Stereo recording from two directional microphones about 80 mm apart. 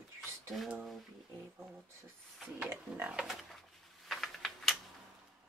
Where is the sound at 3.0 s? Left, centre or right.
Centre.